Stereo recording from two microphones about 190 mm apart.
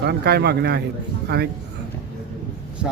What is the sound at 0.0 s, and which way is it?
Speech, 60° right (ahead or behind).